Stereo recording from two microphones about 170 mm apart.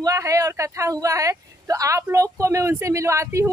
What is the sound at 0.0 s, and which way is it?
Speech, 20° right (ahead or behind).